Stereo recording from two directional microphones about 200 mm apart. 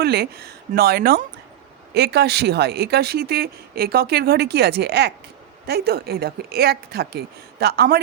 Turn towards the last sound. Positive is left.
turn(degrees=-55)  # may be behind; listen again after turning